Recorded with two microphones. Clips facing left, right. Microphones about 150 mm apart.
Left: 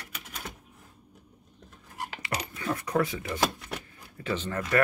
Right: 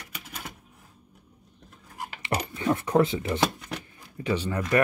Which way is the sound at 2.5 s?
25° right (ahead or behind).